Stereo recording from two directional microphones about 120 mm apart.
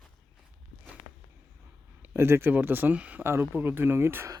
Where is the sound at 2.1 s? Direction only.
20° right (ahead or behind).